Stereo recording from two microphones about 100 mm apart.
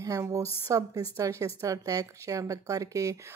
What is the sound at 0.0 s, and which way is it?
A woman's voice, 35° right (ahead or behind).